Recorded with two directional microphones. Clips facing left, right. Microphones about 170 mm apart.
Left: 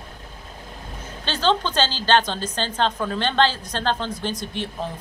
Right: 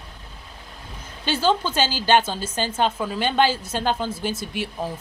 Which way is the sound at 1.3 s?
10° right (ahead or behind).